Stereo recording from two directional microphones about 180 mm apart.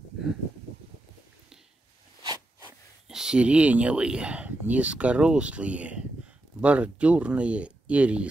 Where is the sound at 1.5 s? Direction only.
5° right (ahead or behind).